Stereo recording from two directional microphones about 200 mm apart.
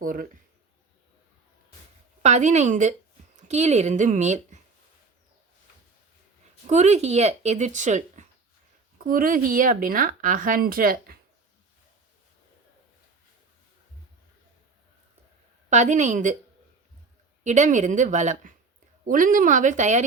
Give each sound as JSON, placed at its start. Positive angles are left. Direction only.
{"t": 0.0, "sound": "a woman's voice", "side_deg": -45}
{"t": 2.2, "sound": "speech", "side_deg": -35}
{"t": 6.7, "sound": "a woman's voice", "side_deg": -35}
{"t": 15.7, "sound": "speech", "side_deg": -35}
{"t": 17.4, "sound": "speech", "side_deg": -35}